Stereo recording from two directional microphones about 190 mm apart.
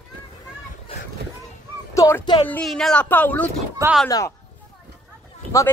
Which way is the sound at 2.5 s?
5° left (ahead or behind).